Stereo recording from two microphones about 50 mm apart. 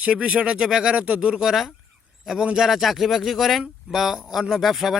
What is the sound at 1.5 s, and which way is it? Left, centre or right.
Speech, centre.